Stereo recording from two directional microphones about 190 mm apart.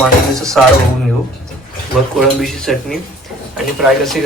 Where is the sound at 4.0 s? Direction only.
Centre (ahead or behind).